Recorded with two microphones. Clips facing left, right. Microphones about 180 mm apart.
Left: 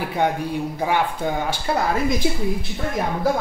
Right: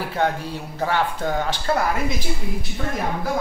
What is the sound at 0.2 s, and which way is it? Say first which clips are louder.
Speech: left 2 dB; 15° left (ahead or behind).